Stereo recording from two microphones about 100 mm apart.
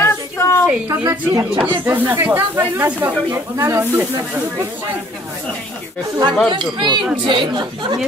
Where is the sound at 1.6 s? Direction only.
20° right (ahead or behind).